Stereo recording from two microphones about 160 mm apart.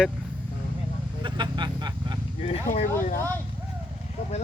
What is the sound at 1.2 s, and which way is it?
Vehicle, 30° right (ahead or behind).